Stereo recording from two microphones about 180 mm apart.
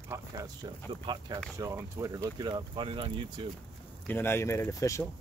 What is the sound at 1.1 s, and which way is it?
Speech, 25° right (ahead or behind).